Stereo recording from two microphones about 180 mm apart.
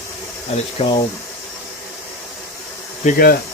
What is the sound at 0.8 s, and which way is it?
Speech, 25° left (ahead or behind).